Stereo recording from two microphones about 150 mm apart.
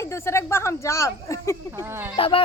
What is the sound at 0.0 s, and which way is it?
A child's voice, 20° left (ahead or behind).